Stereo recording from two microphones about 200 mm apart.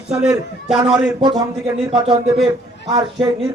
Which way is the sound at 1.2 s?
20° right (ahead or behind).